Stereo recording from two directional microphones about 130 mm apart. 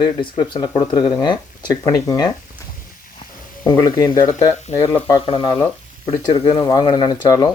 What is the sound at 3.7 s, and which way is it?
Speech, 30° left (ahead or behind).